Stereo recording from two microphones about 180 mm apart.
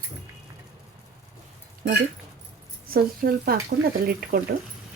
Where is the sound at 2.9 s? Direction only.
55° right (ahead or behind).